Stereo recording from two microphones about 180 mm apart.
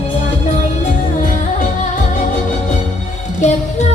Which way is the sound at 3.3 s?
40° left (ahead or behind).